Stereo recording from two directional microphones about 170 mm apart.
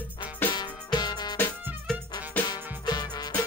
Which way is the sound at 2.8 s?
25° left (ahead or behind).